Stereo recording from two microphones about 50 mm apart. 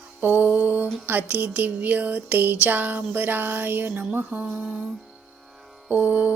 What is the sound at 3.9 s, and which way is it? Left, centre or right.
Music, right.